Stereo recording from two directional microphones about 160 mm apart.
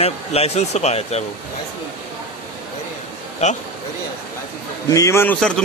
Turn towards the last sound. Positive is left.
turn(degrees=5)  # may be behind; listen again after turning